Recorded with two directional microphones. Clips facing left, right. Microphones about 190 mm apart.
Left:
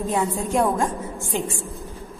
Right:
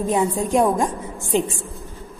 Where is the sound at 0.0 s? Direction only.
15° right (ahead or behind).